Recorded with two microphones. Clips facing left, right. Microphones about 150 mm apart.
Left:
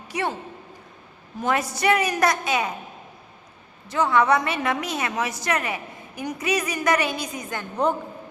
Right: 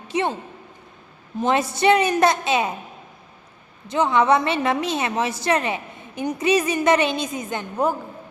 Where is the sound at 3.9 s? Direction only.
20° right (ahead or behind).